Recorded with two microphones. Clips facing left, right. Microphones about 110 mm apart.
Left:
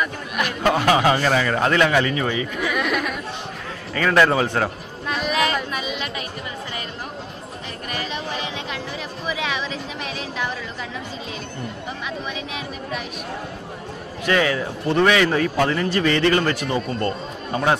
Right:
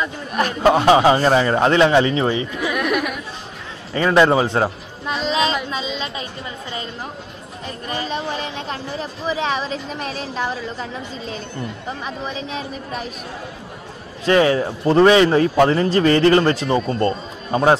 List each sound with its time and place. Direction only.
0.4 s speech: 30° right (ahead or behind)
2.7 s chatter: 10° right (ahead or behind)
3.9 s a sound: 25° right (ahead or behind)
5.7 s music: 20° right (ahead or behind)
7.9 s a sound: 30° right (ahead or behind)
12.4 s speech: 35° right (ahead or behind)
14.2 s speech: 30° right (ahead or behind)